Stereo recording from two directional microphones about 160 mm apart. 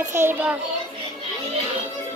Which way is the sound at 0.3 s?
10° right (ahead or behind).